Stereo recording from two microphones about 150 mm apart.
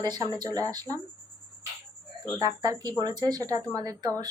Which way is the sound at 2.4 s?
25° right (ahead or behind).